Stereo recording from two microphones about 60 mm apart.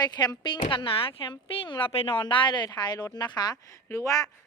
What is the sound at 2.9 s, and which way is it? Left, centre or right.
Speech, left.